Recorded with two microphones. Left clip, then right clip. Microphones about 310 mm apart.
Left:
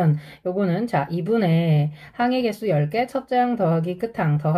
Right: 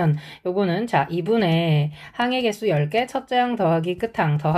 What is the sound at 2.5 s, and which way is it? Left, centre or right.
Speech, centre.